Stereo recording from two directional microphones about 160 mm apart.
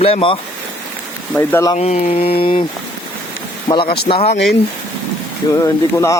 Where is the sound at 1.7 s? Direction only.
40° left (ahead or behind).